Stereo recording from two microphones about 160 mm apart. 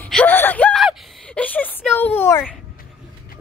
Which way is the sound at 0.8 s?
5° left (ahead or behind).